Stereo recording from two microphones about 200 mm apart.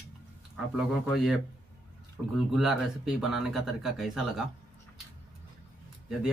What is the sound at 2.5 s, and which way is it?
Speech, centre (ahead or behind).